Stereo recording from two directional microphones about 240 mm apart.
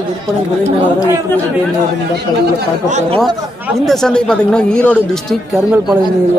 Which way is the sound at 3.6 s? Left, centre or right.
Centre.